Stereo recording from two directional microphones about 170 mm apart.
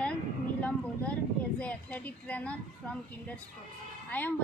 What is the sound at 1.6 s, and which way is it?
Speech, 10° left (ahead or behind).